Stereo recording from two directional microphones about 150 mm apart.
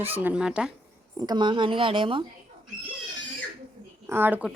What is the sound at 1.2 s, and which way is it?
Speech, 30° right (ahead or behind).